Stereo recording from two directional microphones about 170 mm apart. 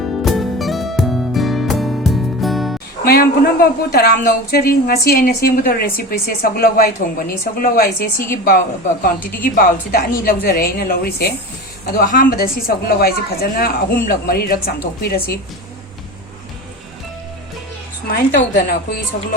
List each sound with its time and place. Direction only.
0.2 s music: centre (ahead or behind)
3.0 s a woman's voice: 60° left (ahead or behind)
18.1 s a woman's voice: 65° left (ahead or behind)